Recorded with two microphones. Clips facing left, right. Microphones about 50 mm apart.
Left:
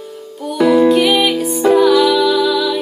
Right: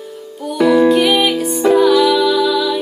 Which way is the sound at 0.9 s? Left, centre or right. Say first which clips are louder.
Even; centre.